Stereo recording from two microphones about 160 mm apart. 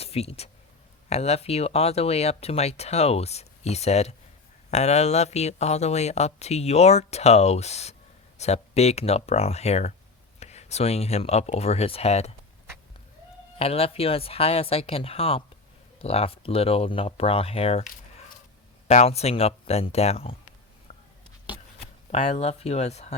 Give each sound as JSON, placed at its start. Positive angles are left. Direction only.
{"t": 0.0, "sound": "speech", "side_deg": 40}
{"t": 13.6, "sound": "speech", "side_deg": 40}
{"t": 18.9, "sound": "speech", "side_deg": 40}
{"t": 20.9, "sound": "a sound", "side_deg": 45}
{"t": 22.1, "sound": "speech", "side_deg": 45}